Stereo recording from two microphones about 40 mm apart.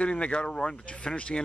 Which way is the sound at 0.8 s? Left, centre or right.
Left.